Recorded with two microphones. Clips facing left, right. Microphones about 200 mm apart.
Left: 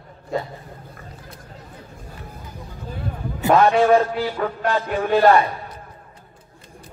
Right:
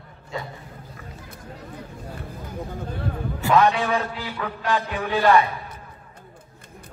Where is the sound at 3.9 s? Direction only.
40° left (ahead or behind).